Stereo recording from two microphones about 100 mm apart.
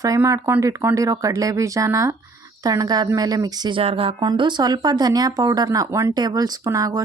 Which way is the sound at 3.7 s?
70° right (ahead or behind).